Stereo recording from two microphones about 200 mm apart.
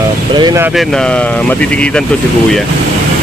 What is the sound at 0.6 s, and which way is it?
Speech, centre (ahead or behind).